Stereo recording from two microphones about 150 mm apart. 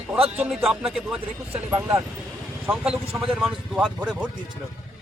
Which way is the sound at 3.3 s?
Centre (ahead or behind).